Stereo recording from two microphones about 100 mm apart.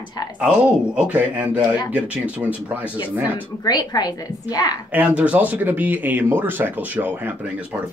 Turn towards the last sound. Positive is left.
turn(degrees=-20)  # may be behind; listen again after turning